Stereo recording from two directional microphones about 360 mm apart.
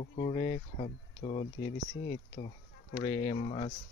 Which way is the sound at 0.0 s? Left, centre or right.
Centre.